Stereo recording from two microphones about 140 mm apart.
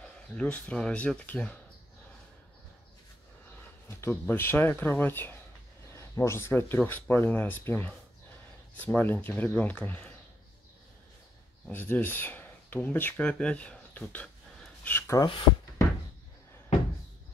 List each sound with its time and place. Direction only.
0.4 s speech: 10° left (ahead or behind)
4.0 s speech: 15° left (ahead or behind)
11.6 s speech: 15° left (ahead or behind)
15.0 s speech: 20° left (ahead or behind)